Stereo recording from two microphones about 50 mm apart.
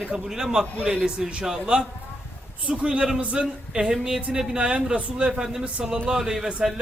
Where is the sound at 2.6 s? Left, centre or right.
Right; by 6.5 s centre.